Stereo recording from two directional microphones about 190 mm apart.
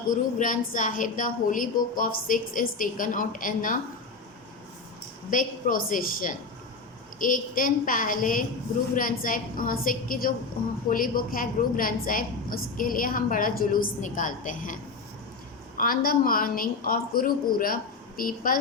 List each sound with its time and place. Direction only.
0.1 s a woman's voice: 45° left (ahead or behind)
5.3 s a woman's voice: 45° left (ahead or behind)
15.8 s a woman's voice: 50° left (ahead or behind)